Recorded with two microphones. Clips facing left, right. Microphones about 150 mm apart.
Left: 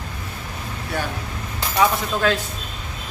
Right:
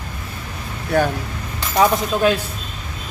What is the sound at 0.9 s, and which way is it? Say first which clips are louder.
Speech: right 10 dB; 45° right (ahead or behind).